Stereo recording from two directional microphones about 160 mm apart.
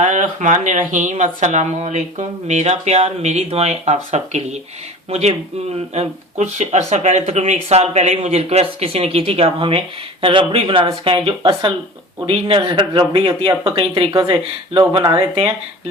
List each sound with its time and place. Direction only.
0.0 s speech: 50° right (ahead or behind)
5.9 s speech: 45° right (ahead or behind)